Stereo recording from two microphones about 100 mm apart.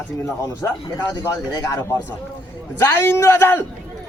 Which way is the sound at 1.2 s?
30° left (ahead or behind).